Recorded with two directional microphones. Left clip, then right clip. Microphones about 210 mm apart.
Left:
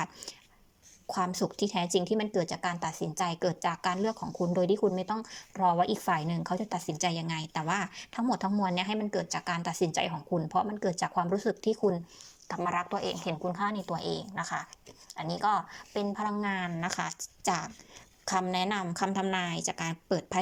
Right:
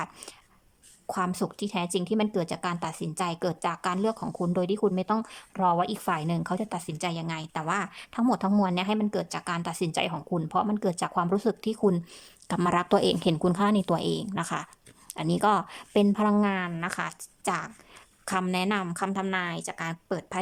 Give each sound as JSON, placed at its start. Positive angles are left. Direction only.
{"t": 1.0, "sound": "speech", "side_deg": -5}
{"t": 12.5, "sound": "a woman's voice", "side_deg": -25}
{"t": 13.5, "sound": "speech", "side_deg": -15}